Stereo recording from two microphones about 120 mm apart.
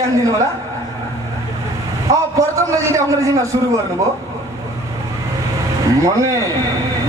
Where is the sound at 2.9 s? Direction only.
25° right (ahead or behind).